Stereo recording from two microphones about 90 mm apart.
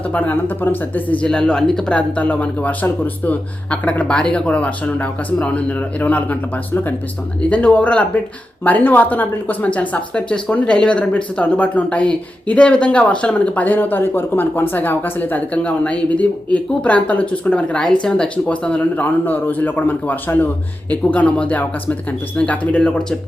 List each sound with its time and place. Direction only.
0.1 s speech: 20° left (ahead or behind)
7.5 s speech: 15° left (ahead or behind)